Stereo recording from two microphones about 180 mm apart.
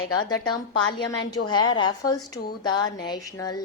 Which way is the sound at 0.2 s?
25° left (ahead or behind).